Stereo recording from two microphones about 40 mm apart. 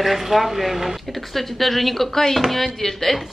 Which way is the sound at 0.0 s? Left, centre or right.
Centre.